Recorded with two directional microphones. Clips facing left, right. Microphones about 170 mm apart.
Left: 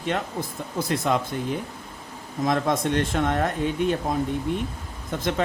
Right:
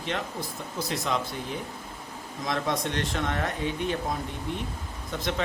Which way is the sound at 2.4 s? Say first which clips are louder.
Left 6 dB; 50° left (ahead or behind).